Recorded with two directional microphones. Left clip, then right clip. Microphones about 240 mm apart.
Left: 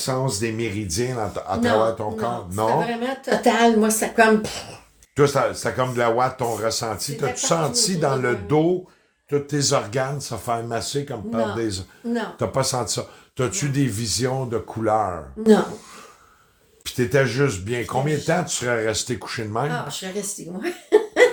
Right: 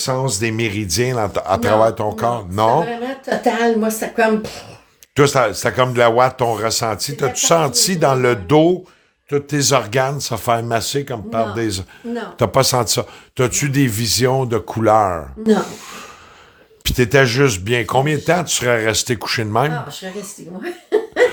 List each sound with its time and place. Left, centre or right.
0.0 s speech: right
3.0 s speech: centre
5.1 s speech: right
16.8 s speech: right